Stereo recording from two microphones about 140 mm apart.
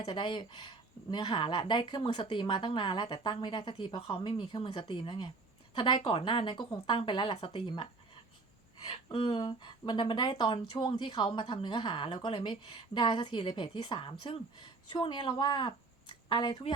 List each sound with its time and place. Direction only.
0.0 s speech: 40° left (ahead or behind)
8.9 s speech: 30° left (ahead or behind)